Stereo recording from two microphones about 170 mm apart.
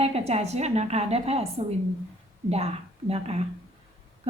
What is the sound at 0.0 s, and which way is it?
A woman's voice, 40° right (ahead or behind).